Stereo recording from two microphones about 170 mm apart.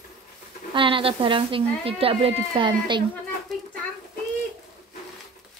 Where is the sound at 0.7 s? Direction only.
30° right (ahead or behind).